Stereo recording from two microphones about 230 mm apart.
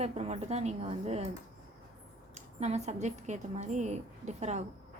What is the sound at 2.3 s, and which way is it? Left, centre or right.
A woman's voice, right.